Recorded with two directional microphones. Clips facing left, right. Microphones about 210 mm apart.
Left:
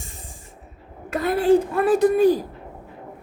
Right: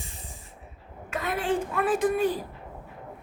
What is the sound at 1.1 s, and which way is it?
A woman's voice, 35° left (ahead or behind).